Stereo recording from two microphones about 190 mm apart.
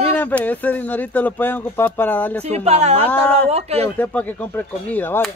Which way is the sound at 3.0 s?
10° left (ahead or behind).